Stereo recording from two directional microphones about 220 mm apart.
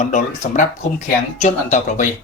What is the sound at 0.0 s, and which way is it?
Speech, 35° left (ahead or behind).